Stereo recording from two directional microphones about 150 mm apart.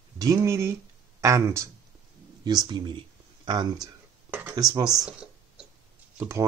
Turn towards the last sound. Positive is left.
turn(degrees=-15)  # may be behind; listen again after turning